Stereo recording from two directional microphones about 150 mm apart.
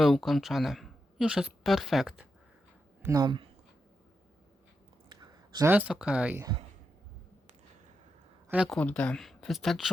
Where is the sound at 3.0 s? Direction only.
25° right (ahead or behind).